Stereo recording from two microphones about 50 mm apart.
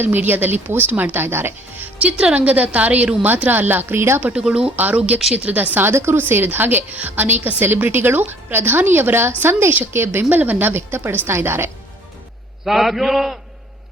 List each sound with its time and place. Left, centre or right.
0.0 s a woman's voice: right
1.2 s a woman's voice: right
2.0 s a woman's voice: right
4.2 s a woman's voice: right
5.9 s speech: right
6.1 s a woman's voice: right
10.2 s a woman's voice: right
12.6 s a man's voice: centre